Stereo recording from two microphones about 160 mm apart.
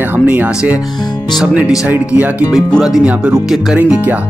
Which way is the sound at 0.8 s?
25° left (ahead or behind).